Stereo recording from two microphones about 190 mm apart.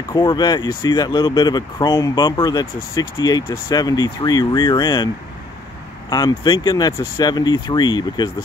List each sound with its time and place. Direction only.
0.1 s speech: 25° left (ahead or behind)